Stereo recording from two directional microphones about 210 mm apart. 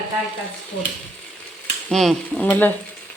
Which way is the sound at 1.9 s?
5° left (ahead or behind).